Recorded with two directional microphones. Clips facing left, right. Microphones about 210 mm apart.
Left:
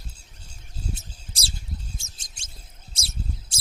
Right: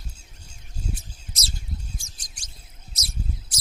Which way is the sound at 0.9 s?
30° left (ahead or behind).